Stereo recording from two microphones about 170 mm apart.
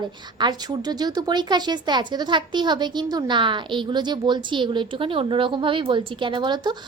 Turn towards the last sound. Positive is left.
turn(degrees=-25)  # may be behind; listen again after turning